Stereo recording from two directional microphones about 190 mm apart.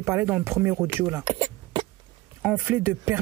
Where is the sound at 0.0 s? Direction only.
10° right (ahead or behind).